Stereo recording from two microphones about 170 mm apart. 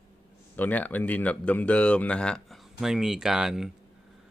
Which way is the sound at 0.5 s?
10° left (ahead or behind).